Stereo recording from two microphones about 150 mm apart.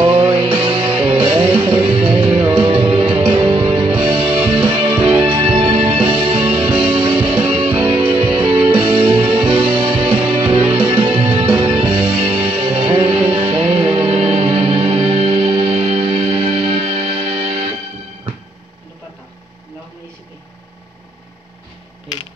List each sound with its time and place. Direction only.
0.0 s music: 35° right (ahead or behind)